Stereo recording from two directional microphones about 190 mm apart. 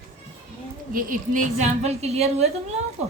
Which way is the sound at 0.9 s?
45° right (ahead or behind).